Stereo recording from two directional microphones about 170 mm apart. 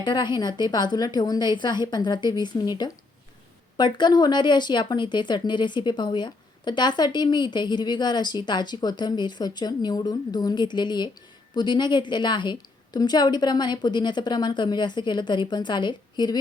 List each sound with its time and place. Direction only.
0.0 s speech: 25° left (ahead or behind)